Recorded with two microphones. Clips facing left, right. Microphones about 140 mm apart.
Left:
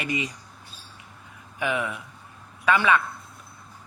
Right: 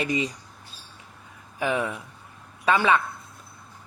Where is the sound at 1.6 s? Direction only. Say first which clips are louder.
Right 2 dB; 35° right (ahead or behind).